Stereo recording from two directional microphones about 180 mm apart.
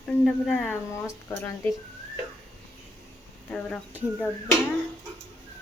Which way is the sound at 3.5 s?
5° left (ahead or behind).